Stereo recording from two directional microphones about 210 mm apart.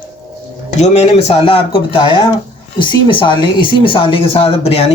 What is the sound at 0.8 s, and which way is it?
Speech, 30° left (ahead or behind).